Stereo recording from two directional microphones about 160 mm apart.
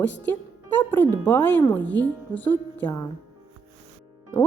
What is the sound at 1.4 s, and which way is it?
Speech, 20° left (ahead or behind).